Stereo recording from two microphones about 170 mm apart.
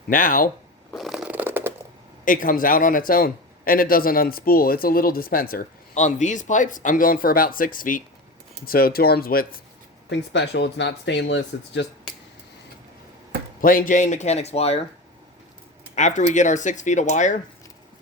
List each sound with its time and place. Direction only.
0.1 s a man's voice: 55° left (ahead or behind)
0.9 s shuffling cards: centre (ahead or behind)
2.2 s a man's voice: 55° left (ahead or behind)
5.9 s a man's voice: 45° left (ahead or behind); by 9.5 s 60° left (ahead or behind)
10.1 s speech: 85° left
13.6 s speech: 55° left (ahead or behind); by 14.8 s 35° left (ahead or behind)
16.0 s speech: 45° left (ahead or behind)